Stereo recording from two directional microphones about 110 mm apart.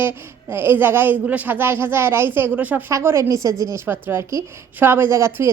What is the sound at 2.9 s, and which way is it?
Speech, 30° right (ahead or behind).